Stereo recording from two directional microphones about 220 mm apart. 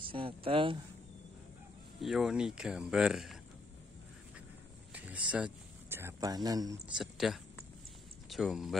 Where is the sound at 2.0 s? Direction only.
Centre (ahead or behind).